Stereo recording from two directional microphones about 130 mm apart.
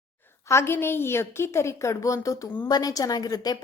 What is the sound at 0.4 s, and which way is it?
A woman's voice, 20° left (ahead or behind).